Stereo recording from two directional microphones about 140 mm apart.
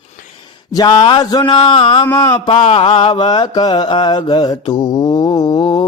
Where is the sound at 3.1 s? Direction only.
35° left (ahead or behind).